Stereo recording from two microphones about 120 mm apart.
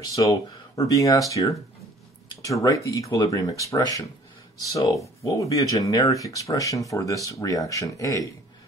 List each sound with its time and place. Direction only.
0.0 s speech: 30° left (ahead or behind)